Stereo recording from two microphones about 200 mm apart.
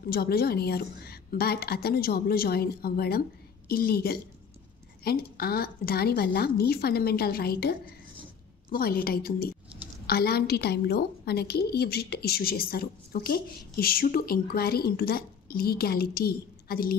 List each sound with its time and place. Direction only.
0.1 s a woman's voice: 50° left (ahead or behind)
8.7 s a woman's voice: 50° left (ahead or behind)